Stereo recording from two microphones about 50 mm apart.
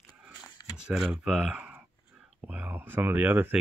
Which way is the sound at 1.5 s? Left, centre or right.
Right.